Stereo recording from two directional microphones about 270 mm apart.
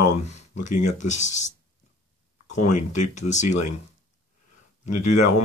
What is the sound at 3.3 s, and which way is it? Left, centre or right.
Speech, left.